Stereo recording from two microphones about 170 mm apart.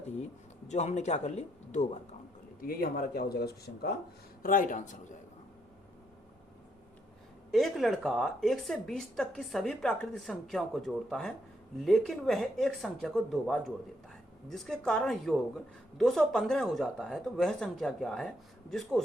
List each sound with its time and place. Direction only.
0.7 s speech: 40° left (ahead or behind)
2.6 s speech: 60° left (ahead or behind)
4.4 s speech: 50° left (ahead or behind)
7.5 s a woman's voice: centre (ahead or behind)